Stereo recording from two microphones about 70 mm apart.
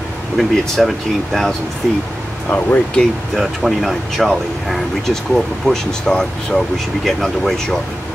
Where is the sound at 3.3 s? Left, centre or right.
Centre.